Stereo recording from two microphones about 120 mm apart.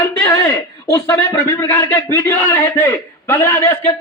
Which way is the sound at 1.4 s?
25° left (ahead or behind).